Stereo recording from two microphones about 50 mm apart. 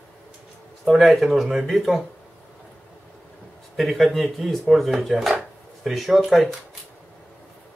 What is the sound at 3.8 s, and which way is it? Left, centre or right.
Speech, centre.